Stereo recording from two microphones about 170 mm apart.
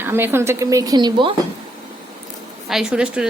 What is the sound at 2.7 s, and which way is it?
Speech, 5° right (ahead or behind).